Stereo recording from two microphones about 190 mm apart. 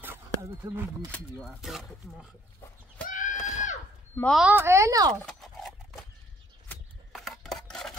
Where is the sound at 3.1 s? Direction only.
40° left (ahead or behind).